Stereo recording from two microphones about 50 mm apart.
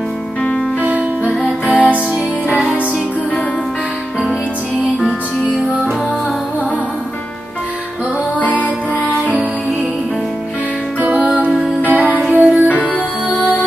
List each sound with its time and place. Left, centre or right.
1.2 s music: right
8.4 s music: left
11.0 s music: right